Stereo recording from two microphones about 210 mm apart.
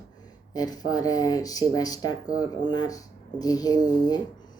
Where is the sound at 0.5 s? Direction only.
20° left (ahead or behind).